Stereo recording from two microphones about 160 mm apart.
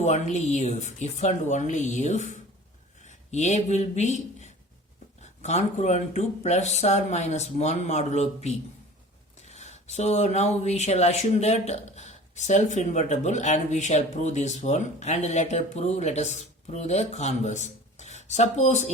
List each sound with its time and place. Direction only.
0.0 s speech: 45° left (ahead or behind)